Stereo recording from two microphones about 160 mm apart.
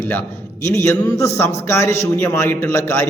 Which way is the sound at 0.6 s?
20° left (ahead or behind).